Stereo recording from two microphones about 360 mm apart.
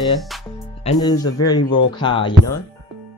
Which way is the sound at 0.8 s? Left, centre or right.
Centre.